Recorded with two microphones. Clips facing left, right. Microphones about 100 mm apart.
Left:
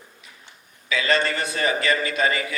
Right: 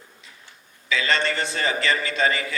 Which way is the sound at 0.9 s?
30° right (ahead or behind).